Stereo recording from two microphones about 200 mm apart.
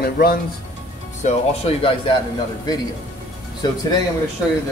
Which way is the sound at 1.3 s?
30° left (ahead or behind).